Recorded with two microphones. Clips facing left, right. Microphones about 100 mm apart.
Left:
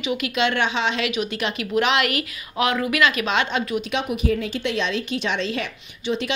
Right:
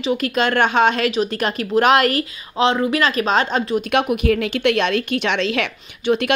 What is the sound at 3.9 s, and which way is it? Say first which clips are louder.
A woman's voice: right 6 dB; 60° right (ahead or behind).